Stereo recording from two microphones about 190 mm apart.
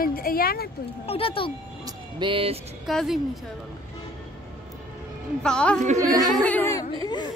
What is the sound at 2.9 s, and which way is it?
Speech, centre (ahead or behind).